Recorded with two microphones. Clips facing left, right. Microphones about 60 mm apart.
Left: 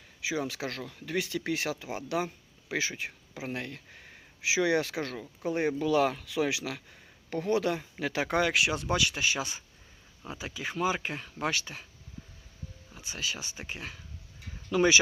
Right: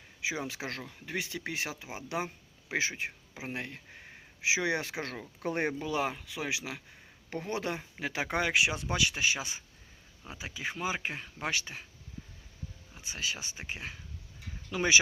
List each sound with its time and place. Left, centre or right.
0.2 s speech: right
5.4 s speech: right
5.8 s speech: centre
13.0 s speech: right